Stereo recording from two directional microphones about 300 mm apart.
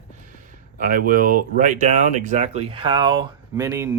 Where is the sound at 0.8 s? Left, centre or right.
Right.